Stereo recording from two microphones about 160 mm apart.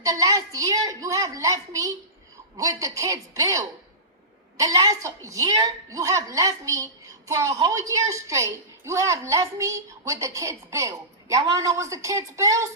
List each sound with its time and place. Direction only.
0.0 s a woman's voice: 20° right (ahead or behind)